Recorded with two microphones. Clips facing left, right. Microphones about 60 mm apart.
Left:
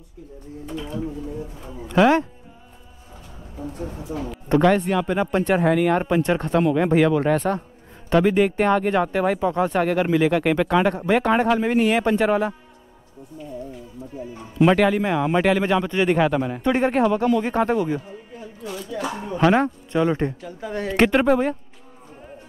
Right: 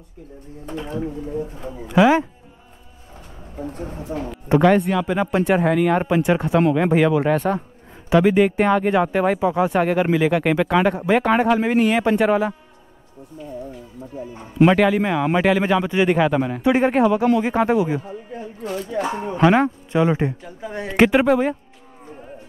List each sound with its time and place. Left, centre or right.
0.7 s speech: right
2.0 s speech: centre
3.5 s speech: right
4.3 s speech: centre
14.1 s a man's voice: right
14.7 s speech: centre
18.3 s speech: right
19.4 s speech: centre